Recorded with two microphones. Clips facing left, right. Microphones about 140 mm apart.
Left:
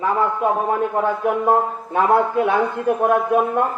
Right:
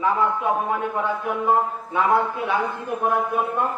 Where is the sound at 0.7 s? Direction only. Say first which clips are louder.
Left 5 dB; 45° left (ahead or behind).